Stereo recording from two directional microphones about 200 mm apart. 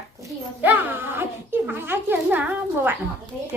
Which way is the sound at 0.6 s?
10° right (ahead or behind).